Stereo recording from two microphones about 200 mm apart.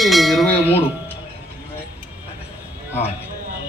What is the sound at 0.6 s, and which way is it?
Speech, 10° left (ahead or behind).